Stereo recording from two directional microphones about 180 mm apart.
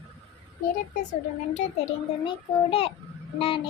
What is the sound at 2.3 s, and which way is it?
A child's voice, 35° left (ahead or behind).